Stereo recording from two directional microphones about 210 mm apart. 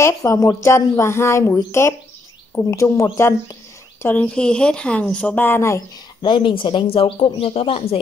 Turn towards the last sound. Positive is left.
turn(degrees=30)  # may be behind; listen again after turning